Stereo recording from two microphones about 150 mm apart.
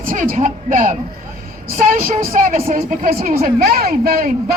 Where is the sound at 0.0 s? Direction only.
70° right (ahead or behind).